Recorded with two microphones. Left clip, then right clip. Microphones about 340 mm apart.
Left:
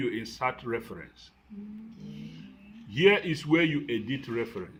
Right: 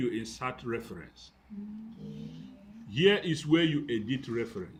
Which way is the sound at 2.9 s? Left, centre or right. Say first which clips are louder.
Left 3 dB; centre.